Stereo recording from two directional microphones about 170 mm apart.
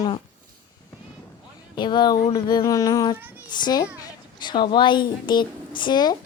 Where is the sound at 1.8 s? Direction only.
25° left (ahead or behind).